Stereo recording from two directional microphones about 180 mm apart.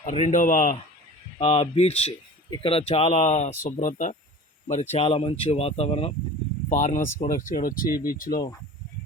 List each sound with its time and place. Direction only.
0.0 s speech: 40° left (ahead or behind)
1.4 s speech: 35° left (ahead or behind)
4.9 s speech: 30° left (ahead or behind)
6.7 s speech: 45° left (ahead or behind)